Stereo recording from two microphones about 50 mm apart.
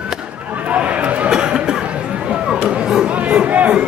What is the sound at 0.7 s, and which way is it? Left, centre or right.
Chatter, right.